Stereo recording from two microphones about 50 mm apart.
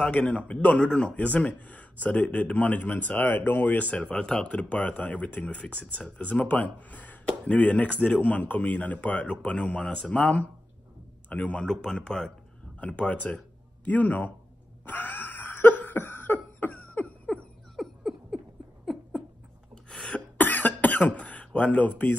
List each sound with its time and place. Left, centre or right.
0.0 s speech: left
0.8 s speech: centre
1.1 s speech: left
3.9 s speech: left
11.5 s speech: centre
12.8 s speech: left
14.9 s cough: left
17.8 s a sound: centre
19.7 s a sound: centre
20.3 s cough: left
21.2 s a sound: left